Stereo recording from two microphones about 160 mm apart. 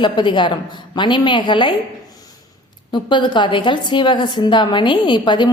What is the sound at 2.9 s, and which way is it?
A woman's voice, 30° left (ahead or behind).